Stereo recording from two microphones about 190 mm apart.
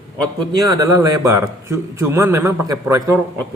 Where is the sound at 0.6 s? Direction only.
20° right (ahead or behind).